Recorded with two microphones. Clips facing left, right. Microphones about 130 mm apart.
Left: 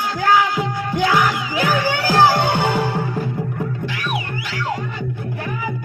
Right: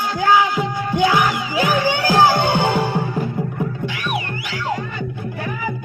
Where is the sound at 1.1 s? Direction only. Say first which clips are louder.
Even; 15° right (ahead or behind).